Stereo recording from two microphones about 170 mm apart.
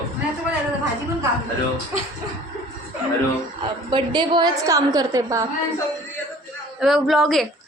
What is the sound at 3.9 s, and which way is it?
A woman's voice, 25° right (ahead or behind).